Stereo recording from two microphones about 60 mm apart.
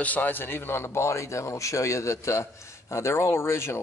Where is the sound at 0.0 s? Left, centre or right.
Left.